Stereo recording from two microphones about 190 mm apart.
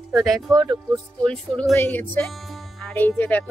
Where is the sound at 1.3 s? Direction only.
5° left (ahead or behind).